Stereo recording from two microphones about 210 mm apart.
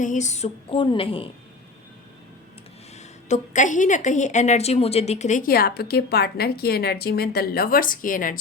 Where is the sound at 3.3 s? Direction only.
35° left (ahead or behind).